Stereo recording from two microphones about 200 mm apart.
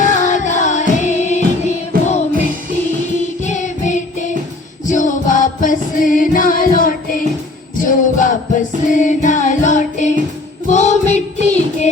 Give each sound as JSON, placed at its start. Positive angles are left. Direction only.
{"t": 0.0, "sound": "music", "side_deg": 40}
{"t": 1.9, "sound": "music", "side_deg": -45}
{"t": 3.4, "sound": "music", "side_deg": 35}